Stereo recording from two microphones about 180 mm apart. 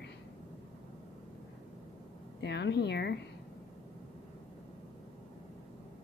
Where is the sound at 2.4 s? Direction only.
70° left (ahead or behind).